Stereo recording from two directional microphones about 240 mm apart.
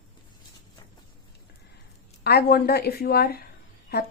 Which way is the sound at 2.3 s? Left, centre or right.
Left.